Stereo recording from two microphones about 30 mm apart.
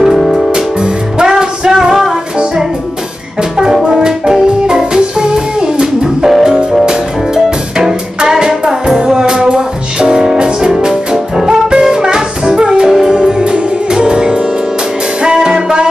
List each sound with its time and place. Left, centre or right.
0.0 s music: centre
0.5 s music: right
3.5 s music: right
8.2 s music: right